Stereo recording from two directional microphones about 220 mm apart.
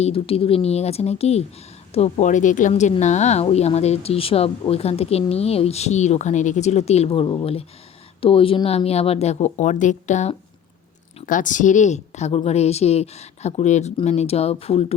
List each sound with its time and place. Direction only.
0.0 s a woman's voice: 25° left (ahead or behind)